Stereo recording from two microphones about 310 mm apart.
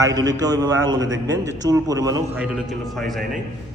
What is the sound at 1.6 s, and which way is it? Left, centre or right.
A man's voice, centre.